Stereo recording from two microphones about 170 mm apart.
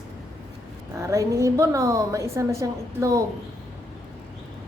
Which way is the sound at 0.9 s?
20° right (ahead or behind).